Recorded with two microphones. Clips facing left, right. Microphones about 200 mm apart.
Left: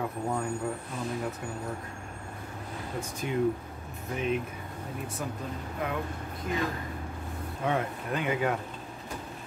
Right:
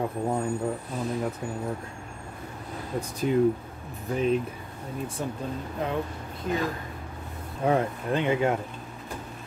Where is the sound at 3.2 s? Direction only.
35° right (ahead or behind).